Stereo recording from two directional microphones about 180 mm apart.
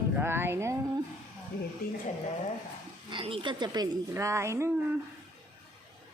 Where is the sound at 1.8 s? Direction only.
55° left (ahead or behind).